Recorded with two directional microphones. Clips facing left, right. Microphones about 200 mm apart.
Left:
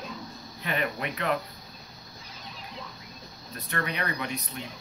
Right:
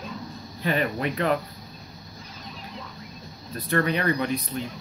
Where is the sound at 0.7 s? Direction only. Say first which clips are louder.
Right 5 dB; 35° right (ahead or behind).